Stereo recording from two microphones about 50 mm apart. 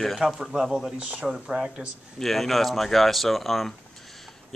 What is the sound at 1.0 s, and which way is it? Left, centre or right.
Speech, right.